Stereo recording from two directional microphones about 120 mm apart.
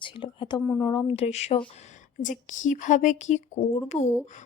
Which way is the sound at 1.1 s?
60° left (ahead or behind).